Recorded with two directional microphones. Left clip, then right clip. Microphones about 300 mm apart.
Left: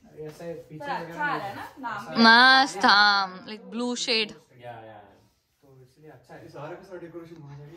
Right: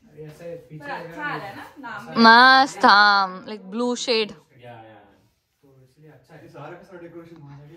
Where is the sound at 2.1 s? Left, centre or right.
Centre.